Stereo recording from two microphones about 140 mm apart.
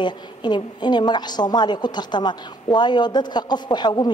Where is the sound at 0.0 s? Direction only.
30° left (ahead or behind).